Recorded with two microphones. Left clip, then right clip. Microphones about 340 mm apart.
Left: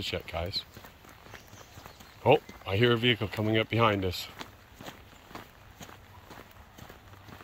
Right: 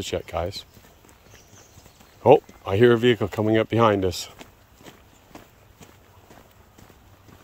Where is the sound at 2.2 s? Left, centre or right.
Centre.